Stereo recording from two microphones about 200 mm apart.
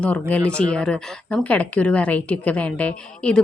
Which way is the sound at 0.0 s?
5° left (ahead or behind).